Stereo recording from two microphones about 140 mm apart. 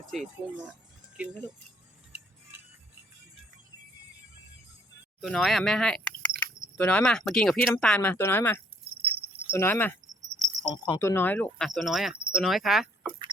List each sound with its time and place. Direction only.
0.1 s speech: centre (ahead or behind)
5.2 s speech: 5° left (ahead or behind)
6.4 s a sound: 10° left (ahead or behind)
7.3 s speech: 5° left (ahead or behind)
10.2 s cricket: 60° right (ahead or behind)
10.6 s speech: 25° left (ahead or behind); by 13.1 s 5° right (ahead or behind)